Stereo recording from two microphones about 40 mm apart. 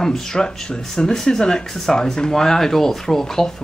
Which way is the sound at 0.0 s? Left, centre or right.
Centre.